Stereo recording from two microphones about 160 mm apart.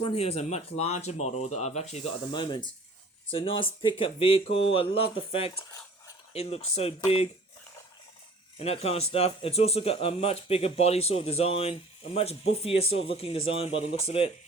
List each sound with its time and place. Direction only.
0.0 s speech: 40° left (ahead or behind)
2.3 s speech: 30° left (ahead or behind)
8.5 s speech: 40° left (ahead or behind)